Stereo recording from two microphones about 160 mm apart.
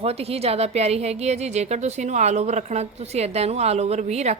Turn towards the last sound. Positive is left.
turn(degrees=-45)  # may be behind; listen again after turning